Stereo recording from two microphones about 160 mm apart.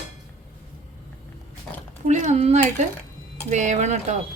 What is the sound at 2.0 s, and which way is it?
A woman's voice, 45° right (ahead or behind).